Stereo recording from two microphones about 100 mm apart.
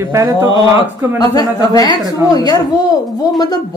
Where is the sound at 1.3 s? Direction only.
35° left (ahead or behind).